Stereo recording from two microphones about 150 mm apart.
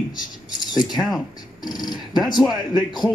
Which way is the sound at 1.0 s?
Centre (ahead or behind).